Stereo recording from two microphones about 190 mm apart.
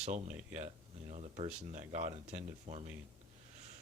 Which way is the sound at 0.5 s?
35° right (ahead or behind).